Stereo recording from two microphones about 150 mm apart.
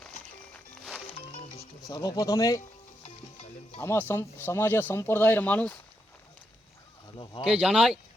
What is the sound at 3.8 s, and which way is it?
Speech, 15° left (ahead or behind).